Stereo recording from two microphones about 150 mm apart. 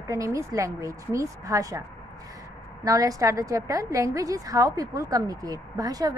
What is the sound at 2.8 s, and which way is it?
A woman's voice, 25° right (ahead or behind).